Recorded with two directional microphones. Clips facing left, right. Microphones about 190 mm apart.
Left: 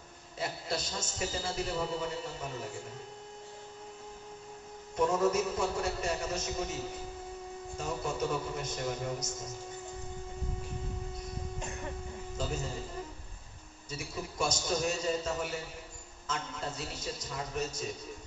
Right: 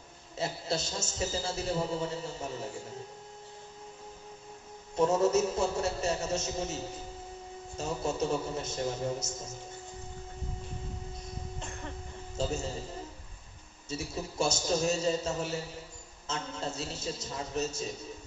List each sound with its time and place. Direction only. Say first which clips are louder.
0.4 s a man's voice: right 3 dB; 25° right (ahead or behind)
4.9 s a man's voice: right 3 dB; 25° right (ahead or behind)
12.4 s a man's voice: right 4 dB; 25° right (ahead or behind)
13.8 s a man's voice: right 3 dB; 25° right (ahead or behind)